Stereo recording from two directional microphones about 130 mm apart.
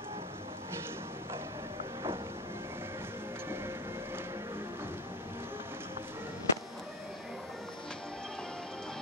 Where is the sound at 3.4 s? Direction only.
15° right (ahead or behind).